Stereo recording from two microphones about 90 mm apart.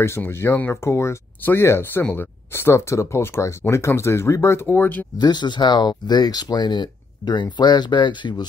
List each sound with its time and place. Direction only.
0.0 s speech: 30° left (ahead or behind)
5.1 s speech: 50° left (ahead or behind)